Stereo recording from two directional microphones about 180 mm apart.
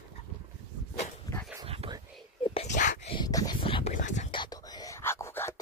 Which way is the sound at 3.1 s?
20° left (ahead or behind).